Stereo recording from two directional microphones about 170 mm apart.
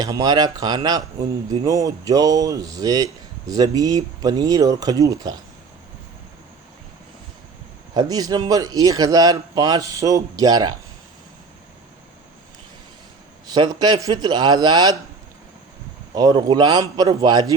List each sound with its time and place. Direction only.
0.0 s speech: 20° right (ahead or behind)
7.9 s speech: 20° right (ahead or behind)
13.5 s speech: 25° right (ahead or behind)
16.1 s speech: 25° right (ahead or behind)